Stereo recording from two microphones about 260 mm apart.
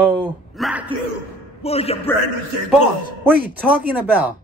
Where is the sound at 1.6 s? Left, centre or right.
Left.